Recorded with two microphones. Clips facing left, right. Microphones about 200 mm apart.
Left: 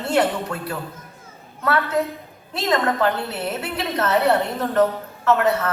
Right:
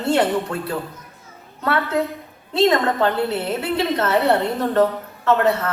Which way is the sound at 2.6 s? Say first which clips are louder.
Right 4 dB; 25° right (ahead or behind).